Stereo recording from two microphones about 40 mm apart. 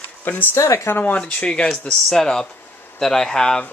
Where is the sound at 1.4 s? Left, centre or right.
Left.